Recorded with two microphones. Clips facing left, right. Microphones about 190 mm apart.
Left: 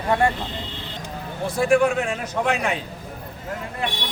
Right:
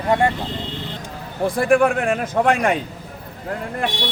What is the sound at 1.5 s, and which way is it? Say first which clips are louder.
A man's voice: right 1 dB; 55° right (ahead or behind).